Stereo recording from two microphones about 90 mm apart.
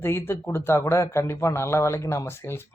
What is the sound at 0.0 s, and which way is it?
A man's voice, 25° left (ahead or behind).